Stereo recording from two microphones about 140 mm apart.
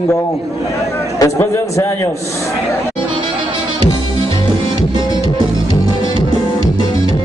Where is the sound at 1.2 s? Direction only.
20° left (ahead or behind).